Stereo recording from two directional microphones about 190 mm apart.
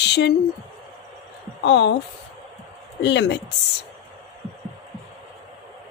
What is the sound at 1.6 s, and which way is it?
Speech, 70° left (ahead or behind).